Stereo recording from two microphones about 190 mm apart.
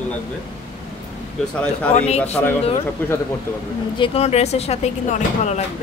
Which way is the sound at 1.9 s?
35° left (ahead or behind).